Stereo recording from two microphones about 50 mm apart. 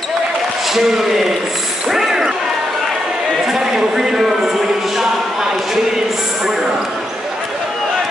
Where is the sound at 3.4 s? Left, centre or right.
Centre.